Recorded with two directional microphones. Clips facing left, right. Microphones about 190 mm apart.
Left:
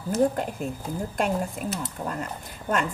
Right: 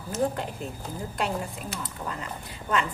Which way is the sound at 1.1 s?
45° left (ahead or behind).